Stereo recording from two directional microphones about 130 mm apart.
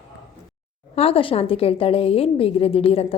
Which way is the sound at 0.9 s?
50° left (ahead or behind).